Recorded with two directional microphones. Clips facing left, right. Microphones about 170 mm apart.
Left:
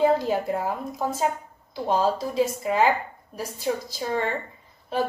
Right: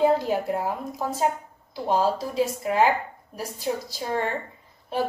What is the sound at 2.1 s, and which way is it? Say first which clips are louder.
Speech: left 1 dB; 15° left (ahead or behind).